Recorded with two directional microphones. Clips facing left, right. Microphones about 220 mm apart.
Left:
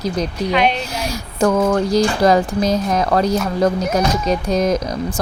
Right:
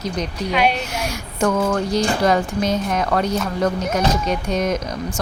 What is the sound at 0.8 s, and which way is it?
Speech, 35° left (ahead or behind).